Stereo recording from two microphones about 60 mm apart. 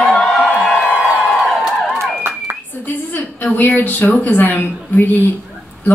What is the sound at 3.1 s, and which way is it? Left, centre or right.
A woman's voice, left.